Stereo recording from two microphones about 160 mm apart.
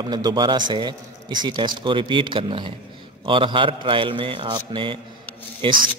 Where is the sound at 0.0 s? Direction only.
25° right (ahead or behind).